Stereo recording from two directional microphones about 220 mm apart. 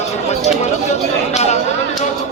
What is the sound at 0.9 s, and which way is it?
Chatter, 30° left (ahead or behind).